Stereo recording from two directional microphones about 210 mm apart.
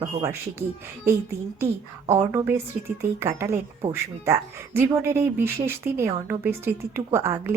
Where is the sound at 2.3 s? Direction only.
10° right (ahead or behind).